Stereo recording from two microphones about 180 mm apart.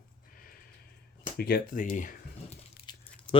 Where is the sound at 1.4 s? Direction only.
60° left (ahead or behind).